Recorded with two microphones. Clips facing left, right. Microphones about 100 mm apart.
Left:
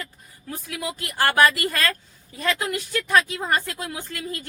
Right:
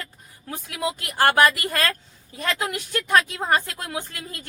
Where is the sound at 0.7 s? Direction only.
20° right (ahead or behind).